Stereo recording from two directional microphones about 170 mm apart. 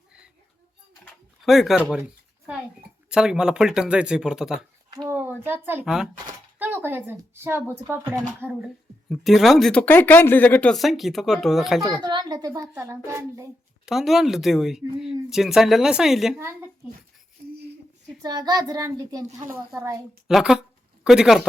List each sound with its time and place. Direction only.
1.4 s speech: centre (ahead or behind)
3.1 s speech: 5° right (ahead or behind)
4.9 s a sound: 20° right (ahead or behind)
5.1 s a child's voice: 10° right (ahead or behind)
9.0 s speech: centre (ahead or behind)
12.0 s speech: 25° right (ahead or behind)
13.8 s speech: centre (ahead or behind)
18.2 s a child's voice: 25° right (ahead or behind)
20.2 s speech: centre (ahead or behind)